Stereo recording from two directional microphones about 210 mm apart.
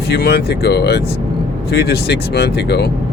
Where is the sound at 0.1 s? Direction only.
50° left (ahead or behind).